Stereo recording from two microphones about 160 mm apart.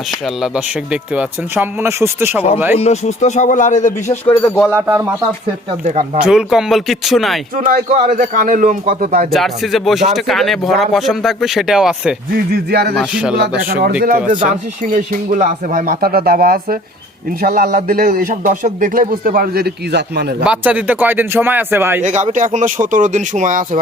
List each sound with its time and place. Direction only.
0.4 s speech: 5° right (ahead or behind)
2.7 s speech: 45° left (ahead or behind)
4.1 s speech: 15° left (ahead or behind)
4.9 s speech: 15° right (ahead or behind)
6.2 s speech: 5° right (ahead or behind)
7.5 s speech: 60° right (ahead or behind)
9.3 s speech: centre (ahead or behind)
12.5 s speech: 75° right (ahead or behind)
20.4 s speech: 5° right (ahead or behind)
22.0 s speech: 50° right (ahead or behind)